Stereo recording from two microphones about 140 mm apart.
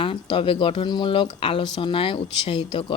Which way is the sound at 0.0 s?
40° left (ahead or behind).